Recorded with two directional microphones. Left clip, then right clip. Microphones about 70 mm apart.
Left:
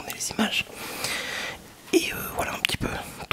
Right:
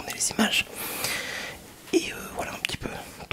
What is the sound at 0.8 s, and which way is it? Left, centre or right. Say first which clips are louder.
Whispering: even; centre.